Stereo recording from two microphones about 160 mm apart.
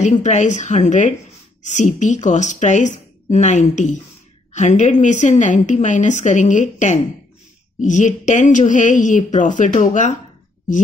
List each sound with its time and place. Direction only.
0.0 s a woman's voice: 45° left (ahead or behind)